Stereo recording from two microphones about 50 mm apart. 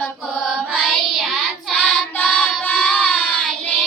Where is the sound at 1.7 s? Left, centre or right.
Centre.